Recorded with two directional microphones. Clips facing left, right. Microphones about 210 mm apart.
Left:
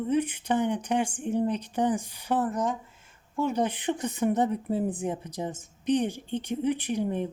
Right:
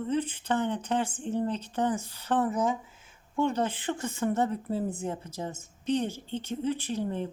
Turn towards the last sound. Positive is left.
turn(degrees=15)  # may be behind; listen again after turning